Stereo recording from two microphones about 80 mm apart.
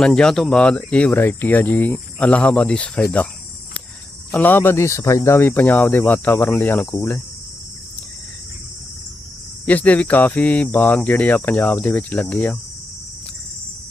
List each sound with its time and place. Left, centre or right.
0.0 s speech: centre
1.1 s speech: left
4.3 s speech: left
9.6 s speech: centre